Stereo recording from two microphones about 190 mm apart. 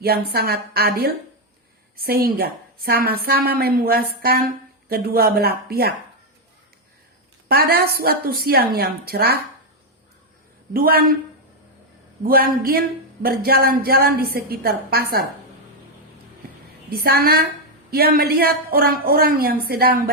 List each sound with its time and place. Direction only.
0.0 s a woman's voice: 55° right (ahead or behind)
7.4 s a woman's voice: 55° right (ahead or behind)
10.8 s a woman's voice: 50° right (ahead or behind)
12.2 s a woman's voice: 50° right (ahead or behind)
16.9 s a woman's voice: 55° right (ahead or behind)